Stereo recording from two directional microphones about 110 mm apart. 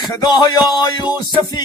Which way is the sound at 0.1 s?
35° left (ahead or behind).